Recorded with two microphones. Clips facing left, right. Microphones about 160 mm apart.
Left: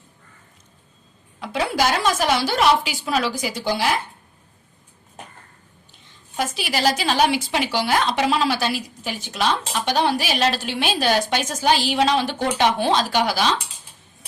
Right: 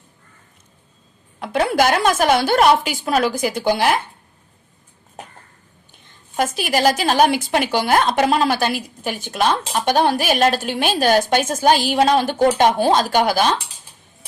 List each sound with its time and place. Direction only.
1.4 s a woman's voice: 55° right (ahead or behind)
6.1 s a woman's voice: 50° right (ahead or behind)